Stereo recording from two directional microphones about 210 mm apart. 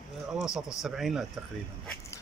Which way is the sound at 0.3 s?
5° right (ahead or behind).